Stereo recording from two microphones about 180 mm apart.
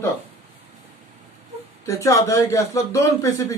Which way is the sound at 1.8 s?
15° left (ahead or behind).